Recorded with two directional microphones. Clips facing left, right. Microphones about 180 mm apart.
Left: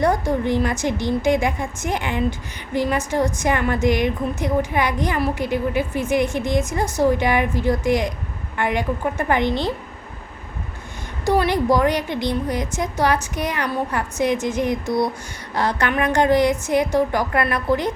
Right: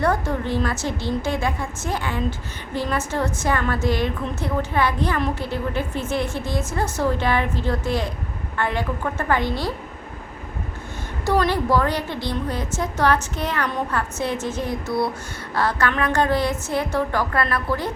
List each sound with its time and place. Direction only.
0.0 s a woman's voice: 15° left (ahead or behind)
11.3 s a woman's voice: 15° left (ahead or behind)